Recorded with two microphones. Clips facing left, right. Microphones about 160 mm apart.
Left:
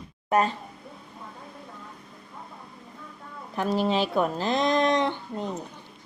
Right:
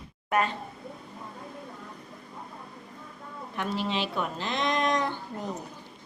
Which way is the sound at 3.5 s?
40° left (ahead or behind).